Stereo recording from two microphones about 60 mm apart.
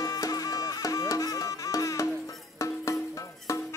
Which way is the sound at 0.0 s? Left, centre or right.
Left.